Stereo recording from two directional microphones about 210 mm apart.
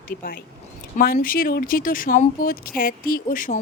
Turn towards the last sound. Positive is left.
turn(degrees=40)  # may be behind; listen again after turning